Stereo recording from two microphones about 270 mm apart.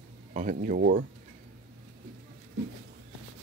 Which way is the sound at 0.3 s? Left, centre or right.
Right.